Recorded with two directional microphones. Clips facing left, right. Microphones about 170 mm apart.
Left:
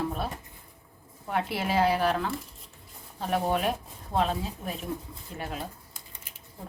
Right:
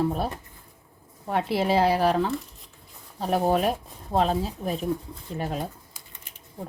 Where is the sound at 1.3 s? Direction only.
35° right (ahead or behind).